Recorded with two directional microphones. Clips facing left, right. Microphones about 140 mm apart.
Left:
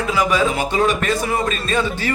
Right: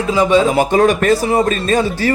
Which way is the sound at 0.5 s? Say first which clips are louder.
Right 6 dB; 45° right (ahead or behind).